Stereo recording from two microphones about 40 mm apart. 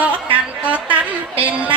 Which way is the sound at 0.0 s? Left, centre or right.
Right.